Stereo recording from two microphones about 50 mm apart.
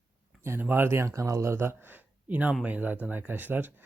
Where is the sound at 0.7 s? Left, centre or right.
Right.